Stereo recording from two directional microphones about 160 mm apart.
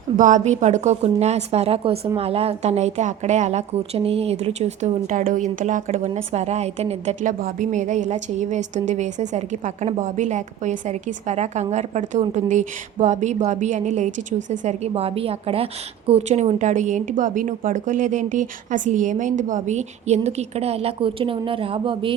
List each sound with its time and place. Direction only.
0.2 s speech: 55° right (ahead or behind); by 22.1 s 35° right (ahead or behind)